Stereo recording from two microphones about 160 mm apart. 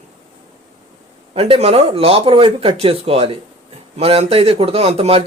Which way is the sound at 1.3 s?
40° right (ahead or behind).